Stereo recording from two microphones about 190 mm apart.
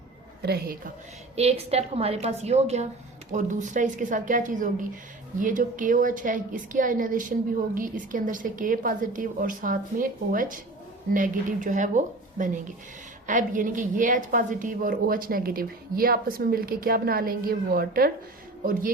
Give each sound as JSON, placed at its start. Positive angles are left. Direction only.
{"t": 0.4, "sound": "a woman's voice", "side_deg": -55}
{"t": 1.4, "sound": "a woman's voice", "side_deg": -30}